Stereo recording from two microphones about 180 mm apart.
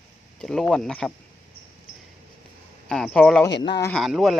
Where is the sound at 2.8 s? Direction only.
5° left (ahead or behind).